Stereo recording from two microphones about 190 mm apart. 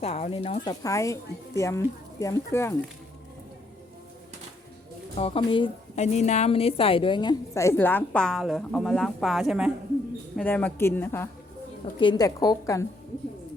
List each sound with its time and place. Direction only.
0.0 s a woman's voice: 30° left (ahead or behind); by 2.7 s 15° left (ahead or behind)
5.1 s a woman's voice: 30° left (ahead or behind); by 9.7 s 5° right (ahead or behind)
10.3 s a woman's voice: 10° left (ahead or behind)
11.9 s a woman's voice: 25° left (ahead or behind)